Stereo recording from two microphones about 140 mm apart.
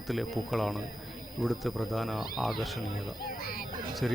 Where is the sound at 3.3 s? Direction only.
90° left.